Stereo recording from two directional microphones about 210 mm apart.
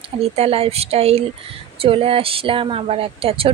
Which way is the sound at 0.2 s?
30° right (ahead or behind).